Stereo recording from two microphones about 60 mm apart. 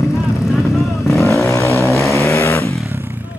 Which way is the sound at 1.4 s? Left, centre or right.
Left.